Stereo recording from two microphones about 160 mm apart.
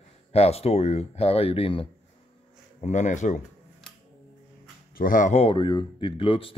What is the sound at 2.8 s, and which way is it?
Speech, 50° left (ahead or behind).